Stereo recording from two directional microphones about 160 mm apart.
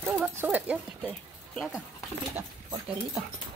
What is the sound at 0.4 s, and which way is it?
Speech, 10° right (ahead or behind).